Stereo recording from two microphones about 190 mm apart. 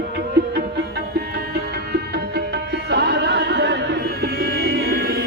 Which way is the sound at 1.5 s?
60° right (ahead or behind).